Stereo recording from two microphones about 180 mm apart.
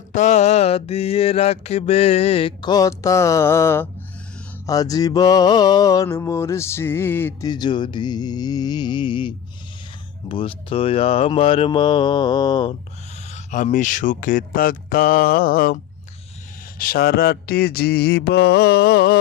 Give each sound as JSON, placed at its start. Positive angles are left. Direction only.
{"t": 0.1, "sound": "mantra", "side_deg": 40}
{"t": 7.4, "sound": "mantra", "side_deg": 25}
{"t": 13.3, "sound": "speech", "side_deg": 40}
{"t": 16.7, "sound": "a sound", "side_deg": 55}